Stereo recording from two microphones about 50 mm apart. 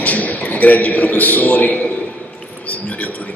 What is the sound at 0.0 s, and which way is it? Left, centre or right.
A man's voice, left.